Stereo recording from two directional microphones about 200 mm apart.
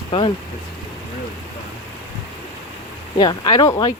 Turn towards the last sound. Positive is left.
turn(degrees=20)  # may be behind; listen again after turning